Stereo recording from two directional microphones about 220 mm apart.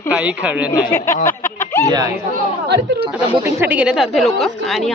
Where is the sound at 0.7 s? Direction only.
15° left (ahead or behind).